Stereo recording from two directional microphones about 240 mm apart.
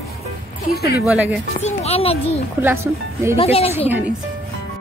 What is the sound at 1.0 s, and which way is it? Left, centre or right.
Speech, centre.